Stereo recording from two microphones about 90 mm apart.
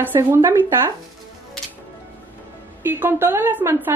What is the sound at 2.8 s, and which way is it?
A woman's voice, 25° right (ahead or behind).